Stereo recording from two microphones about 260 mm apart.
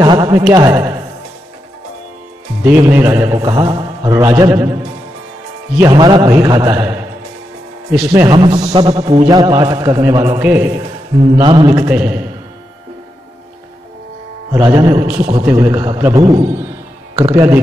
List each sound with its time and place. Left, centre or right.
0.0 s speech: centre
2.6 s speech: centre
5.8 s speech: centre
8.1 s speech: centre
14.5 s speech: centre